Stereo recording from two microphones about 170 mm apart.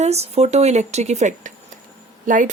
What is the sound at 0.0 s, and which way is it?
Speech, 40° right (ahead or behind).